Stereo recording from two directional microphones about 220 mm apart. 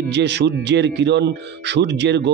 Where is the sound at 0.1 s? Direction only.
50° right (ahead or behind).